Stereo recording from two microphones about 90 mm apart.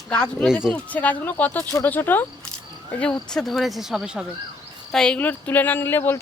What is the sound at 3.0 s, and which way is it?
Speech, 5° left (ahead or behind).